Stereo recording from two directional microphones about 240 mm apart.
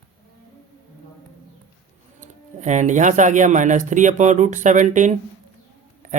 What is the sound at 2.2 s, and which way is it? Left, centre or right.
Speech, right.